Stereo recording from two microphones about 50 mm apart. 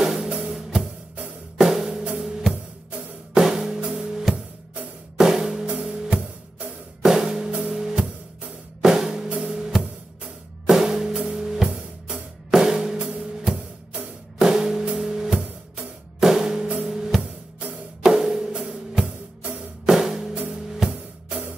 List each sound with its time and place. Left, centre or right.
0.0 s music: centre
1.9 s drum kit: centre
5.1 s music: centre
7.0 s drum: centre
7.6 s music: centre
8.8 s drum kit: centre
9.5 s music: centre
14.4 s music: centre